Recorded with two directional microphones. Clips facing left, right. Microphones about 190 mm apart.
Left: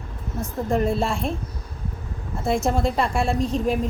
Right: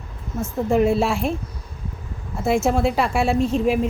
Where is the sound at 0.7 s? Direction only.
5° right (ahead or behind).